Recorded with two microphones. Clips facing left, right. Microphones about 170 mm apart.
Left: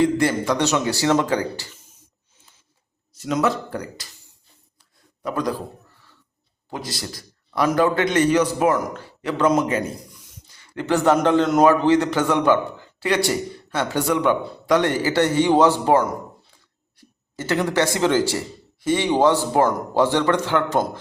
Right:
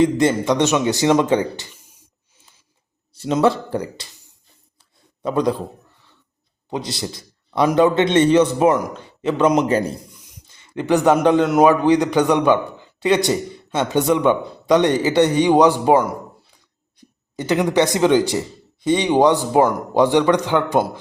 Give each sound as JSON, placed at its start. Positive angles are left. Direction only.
{"t": 0.0, "sound": "a man's voice", "side_deg": -20}
{"t": 3.2, "sound": "a man's voice", "side_deg": -30}
{"t": 5.2, "sound": "a man's voice", "side_deg": -25}
{"t": 6.7, "sound": "a man's voice", "side_deg": -20}
{"t": 9.6, "sound": "speech", "side_deg": -35}
{"t": 10.1, "sound": "speech", "side_deg": -20}